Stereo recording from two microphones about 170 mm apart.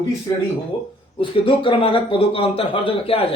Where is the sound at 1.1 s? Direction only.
30° left (ahead or behind).